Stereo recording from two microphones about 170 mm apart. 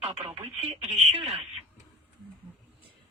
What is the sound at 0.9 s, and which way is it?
Speech, centre (ahead or behind).